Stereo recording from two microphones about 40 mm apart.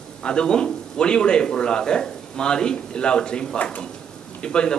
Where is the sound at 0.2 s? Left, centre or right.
Left.